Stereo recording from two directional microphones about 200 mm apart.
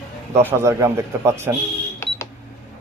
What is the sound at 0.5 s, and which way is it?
A man's voice, 15° right (ahead or behind).